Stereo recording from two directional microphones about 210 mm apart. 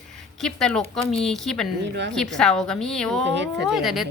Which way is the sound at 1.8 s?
55° right (ahead or behind).